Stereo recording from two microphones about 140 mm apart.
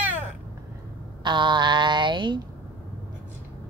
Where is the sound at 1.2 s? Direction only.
35° right (ahead or behind).